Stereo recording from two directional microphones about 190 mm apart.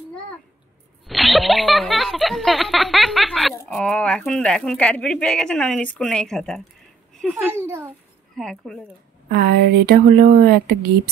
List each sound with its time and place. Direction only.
1.0 s a sound: centre (ahead or behind)
3.7 s a child's voice: 5° left (ahead or behind)
7.5 s a child's voice: 15° right (ahead or behind)
8.4 s speech: centre (ahead or behind)
9.3 s a woman's voice: 60° right (ahead or behind)